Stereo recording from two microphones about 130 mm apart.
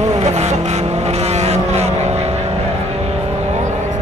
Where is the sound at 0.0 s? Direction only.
60° right (ahead or behind).